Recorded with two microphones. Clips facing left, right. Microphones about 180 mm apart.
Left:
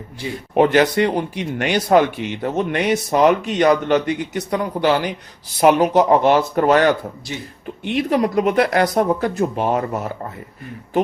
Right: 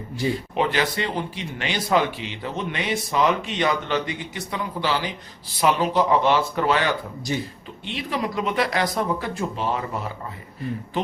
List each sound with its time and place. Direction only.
0.5 s speech: 50° left (ahead or behind)
2.9 s speech: 45° left (ahead or behind)